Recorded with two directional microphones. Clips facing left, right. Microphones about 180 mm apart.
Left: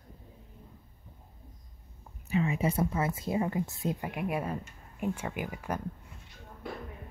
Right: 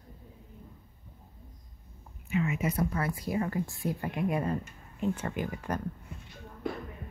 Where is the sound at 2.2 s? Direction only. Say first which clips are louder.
Left 1 dB; 35° left (ahead or behind).